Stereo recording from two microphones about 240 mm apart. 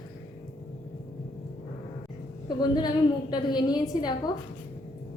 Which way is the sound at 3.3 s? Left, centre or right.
Centre.